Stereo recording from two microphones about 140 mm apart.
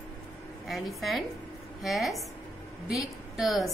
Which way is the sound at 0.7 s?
Centre (ahead or behind).